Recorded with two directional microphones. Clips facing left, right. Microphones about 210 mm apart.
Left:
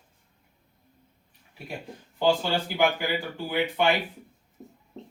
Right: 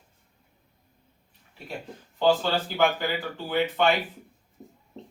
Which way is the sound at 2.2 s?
10° left (ahead or behind).